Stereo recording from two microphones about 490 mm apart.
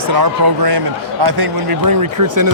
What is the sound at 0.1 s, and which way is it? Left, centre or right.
Speech, right.